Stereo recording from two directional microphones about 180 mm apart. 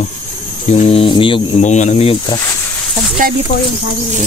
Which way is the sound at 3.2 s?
50° right (ahead or behind).